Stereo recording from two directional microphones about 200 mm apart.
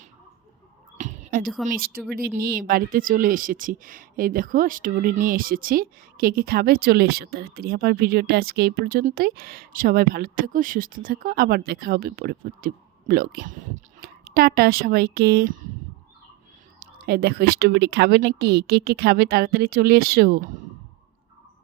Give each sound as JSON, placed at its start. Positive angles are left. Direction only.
{"t": 0.9, "sound": "a sound", "side_deg": -40}
{"t": 1.6, "sound": "speech", "side_deg": -45}
{"t": 16.8, "sound": "speech", "side_deg": -50}